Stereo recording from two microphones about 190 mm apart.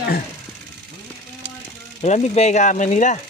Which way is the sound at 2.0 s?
35° left (ahead or behind).